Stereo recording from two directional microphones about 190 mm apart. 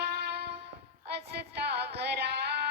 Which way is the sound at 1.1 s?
60° right (ahead or behind).